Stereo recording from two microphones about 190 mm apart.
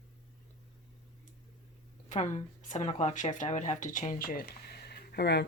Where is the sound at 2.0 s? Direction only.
40° left (ahead or behind).